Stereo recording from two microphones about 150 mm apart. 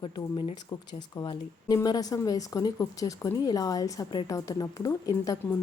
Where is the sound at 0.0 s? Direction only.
35° left (ahead or behind).